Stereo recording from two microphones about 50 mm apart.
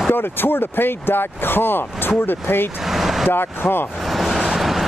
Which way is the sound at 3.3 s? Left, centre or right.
Left.